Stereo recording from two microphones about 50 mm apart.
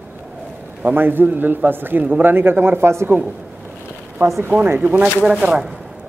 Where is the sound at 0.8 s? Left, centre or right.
Right.